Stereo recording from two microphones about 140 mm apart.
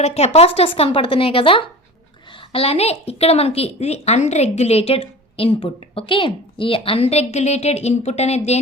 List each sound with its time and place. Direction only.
0.0 s a woman's voice: 50° left (ahead or behind)